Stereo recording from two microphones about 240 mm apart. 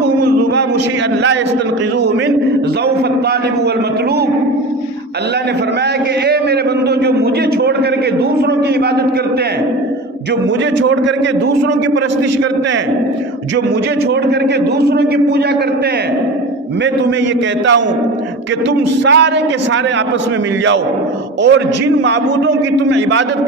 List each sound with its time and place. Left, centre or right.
14.8 s a sound: right
19.0 s a man's voice: right
21.4 s a man's voice: right